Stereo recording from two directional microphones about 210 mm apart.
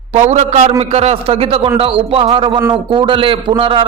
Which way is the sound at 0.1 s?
30° right (ahead or behind).